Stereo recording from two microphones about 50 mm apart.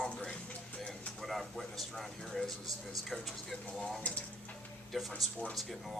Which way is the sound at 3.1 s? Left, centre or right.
Centre.